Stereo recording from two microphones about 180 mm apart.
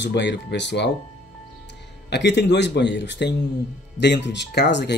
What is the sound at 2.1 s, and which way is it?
Speech, 70° left (ahead or behind).